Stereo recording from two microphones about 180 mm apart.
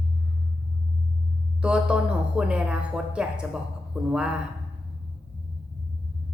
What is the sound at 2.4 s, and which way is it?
Speech, 5° right (ahead or behind).